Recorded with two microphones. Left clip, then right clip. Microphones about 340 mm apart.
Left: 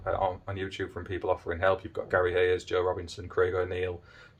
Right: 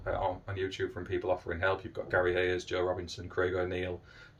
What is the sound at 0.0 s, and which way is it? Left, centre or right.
Speech, centre.